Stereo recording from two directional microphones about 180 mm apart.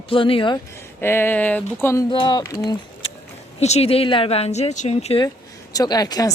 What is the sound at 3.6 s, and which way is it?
Speech, 35° left (ahead or behind).